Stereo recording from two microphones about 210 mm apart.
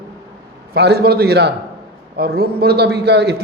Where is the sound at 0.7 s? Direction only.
50° right (ahead or behind).